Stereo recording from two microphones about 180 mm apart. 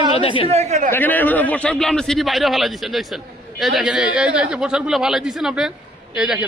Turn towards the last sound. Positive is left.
turn(degrees=-5)  # may be behind; listen again after turning